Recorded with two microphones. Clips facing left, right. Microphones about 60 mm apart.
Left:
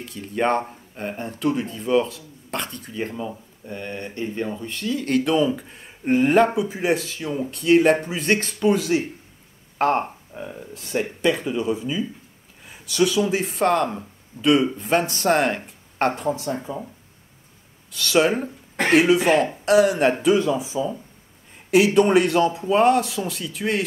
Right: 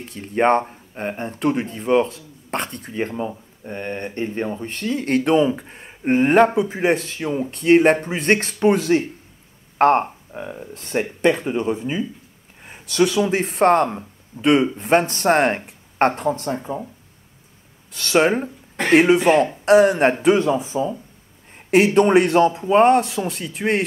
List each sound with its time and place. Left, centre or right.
0.0 s speech: right
10.3 s speech: right
10.7 s speech: right
16.5 s speech: right
17.9 s speech: right